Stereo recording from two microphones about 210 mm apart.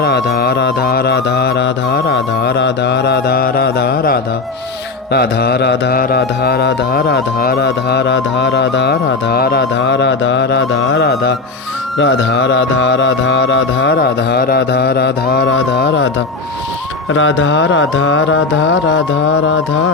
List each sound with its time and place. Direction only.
0.0 s mantra: 50° left (ahead or behind)
11.9 s music: 55° left (ahead or behind)
17.1 s music: 65° left (ahead or behind)